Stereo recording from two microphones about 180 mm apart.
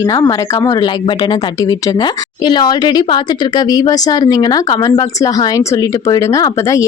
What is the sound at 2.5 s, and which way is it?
A woman's voice, 25° left (ahead or behind).